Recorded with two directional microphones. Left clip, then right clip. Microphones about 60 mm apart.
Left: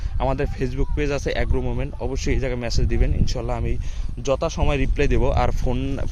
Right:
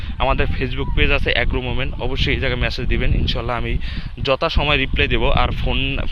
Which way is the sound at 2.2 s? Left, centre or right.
Left.